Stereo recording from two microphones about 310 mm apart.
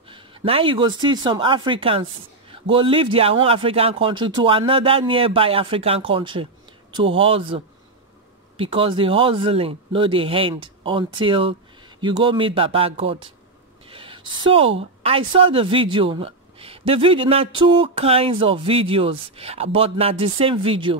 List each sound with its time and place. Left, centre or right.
0.1 s speech: centre
13.8 s a sound: centre
14.4 s speech: centre